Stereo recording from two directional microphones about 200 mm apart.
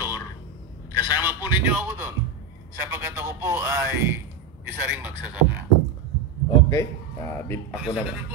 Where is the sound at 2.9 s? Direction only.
10° right (ahead or behind).